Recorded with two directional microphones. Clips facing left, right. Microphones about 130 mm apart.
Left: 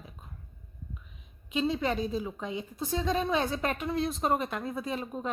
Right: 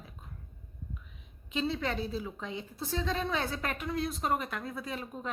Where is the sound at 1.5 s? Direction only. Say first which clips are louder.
Left 4 dB; 15° left (ahead or behind).